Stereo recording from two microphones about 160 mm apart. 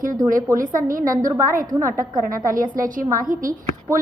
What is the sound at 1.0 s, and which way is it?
A woman's voice, 20° right (ahead or behind).